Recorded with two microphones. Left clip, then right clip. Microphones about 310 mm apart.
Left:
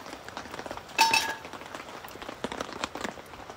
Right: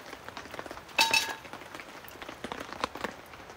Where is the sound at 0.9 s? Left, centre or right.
Centre.